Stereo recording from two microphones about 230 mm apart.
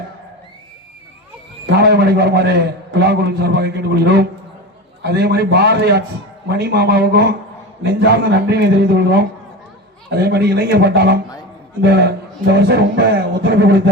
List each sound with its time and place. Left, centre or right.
1.7 s a man's voice: right